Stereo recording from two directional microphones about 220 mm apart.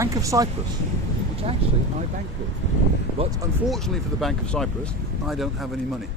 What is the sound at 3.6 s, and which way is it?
Speech, centre (ahead or behind).